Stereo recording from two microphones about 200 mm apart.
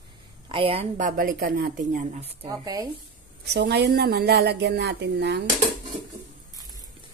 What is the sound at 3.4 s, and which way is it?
Speech, 55° right (ahead or behind).